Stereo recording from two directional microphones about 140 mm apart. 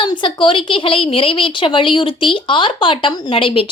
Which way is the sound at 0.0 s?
35° left (ahead or behind).